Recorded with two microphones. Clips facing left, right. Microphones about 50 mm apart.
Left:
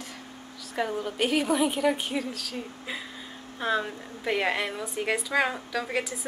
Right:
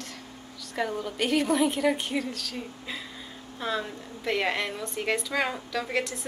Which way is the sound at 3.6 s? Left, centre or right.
Centre.